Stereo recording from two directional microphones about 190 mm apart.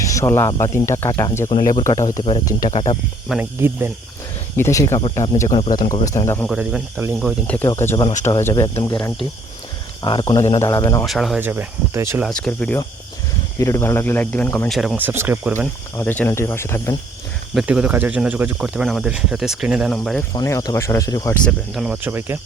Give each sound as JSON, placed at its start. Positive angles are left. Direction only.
{"t": 0.0, "sound": "speech", "side_deg": 15}
{"t": 2.6, "sound": "speech", "side_deg": 35}
{"t": 3.2, "sound": "speech", "side_deg": -5}
{"t": 4.5, "sound": "speech", "side_deg": 15}
{"t": 6.5, "sound": "speech", "side_deg": -5}
{"t": 7.2, "sound": "speech", "side_deg": 5}
{"t": 11.0, "sound": "speech", "side_deg": 0}
{"t": 12.2, "sound": "speech", "side_deg": 5}
{"t": 14.7, "sound": "speech", "side_deg": 0}
{"t": 16.0, "sound": "speech", "side_deg": 10}
{"t": 17.5, "sound": "speech", "side_deg": 0}
{"t": 20.3, "sound": "speech", "side_deg": 20}
{"t": 21.7, "sound": "speech", "side_deg": -5}